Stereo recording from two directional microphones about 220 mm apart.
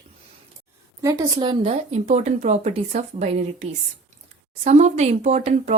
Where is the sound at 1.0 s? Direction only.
20° right (ahead or behind).